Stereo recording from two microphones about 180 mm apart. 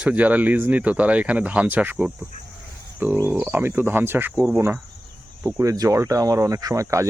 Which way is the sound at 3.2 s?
10° right (ahead or behind).